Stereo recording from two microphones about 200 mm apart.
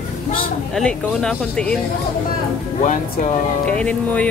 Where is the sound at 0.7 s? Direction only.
5° left (ahead or behind).